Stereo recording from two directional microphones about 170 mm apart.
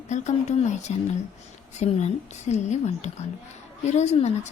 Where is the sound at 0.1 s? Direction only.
45° left (ahead or behind).